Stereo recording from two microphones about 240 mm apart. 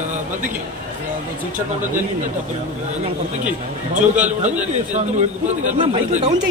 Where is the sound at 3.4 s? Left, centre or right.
Right.